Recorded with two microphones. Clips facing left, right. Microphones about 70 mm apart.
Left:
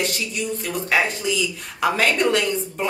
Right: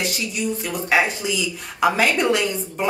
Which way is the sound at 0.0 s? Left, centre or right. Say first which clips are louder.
Right 1 dB; centre.